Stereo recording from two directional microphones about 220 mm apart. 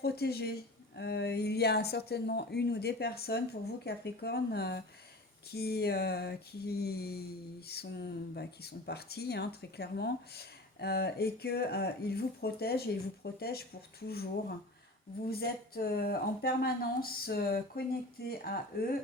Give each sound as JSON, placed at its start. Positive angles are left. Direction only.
{"t": 0.0, "sound": "speech", "side_deg": 45}
{"t": 15.3, "sound": "speech", "side_deg": 45}